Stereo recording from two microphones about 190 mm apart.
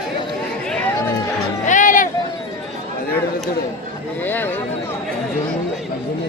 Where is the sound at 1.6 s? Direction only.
45° left (ahead or behind).